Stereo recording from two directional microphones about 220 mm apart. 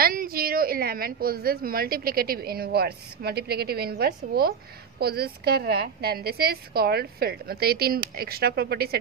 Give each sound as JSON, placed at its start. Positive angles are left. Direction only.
{"t": 0.0, "sound": "a woman's voice", "side_deg": -40}